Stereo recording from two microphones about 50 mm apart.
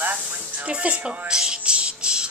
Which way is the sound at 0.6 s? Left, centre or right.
Right.